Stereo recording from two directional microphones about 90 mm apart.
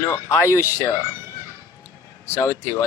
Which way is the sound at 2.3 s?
35° left (ahead or behind).